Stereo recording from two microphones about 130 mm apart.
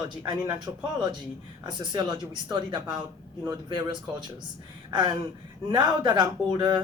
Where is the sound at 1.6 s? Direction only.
35° right (ahead or behind).